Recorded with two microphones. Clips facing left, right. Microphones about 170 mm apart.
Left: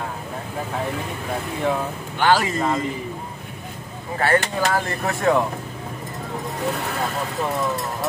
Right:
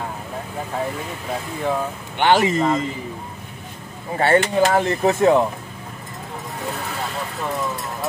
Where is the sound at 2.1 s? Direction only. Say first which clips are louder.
Right 2 dB; 25° right (ahead or behind).